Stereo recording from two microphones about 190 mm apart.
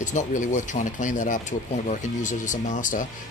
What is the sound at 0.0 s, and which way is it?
Speech, 40° left (ahead or behind).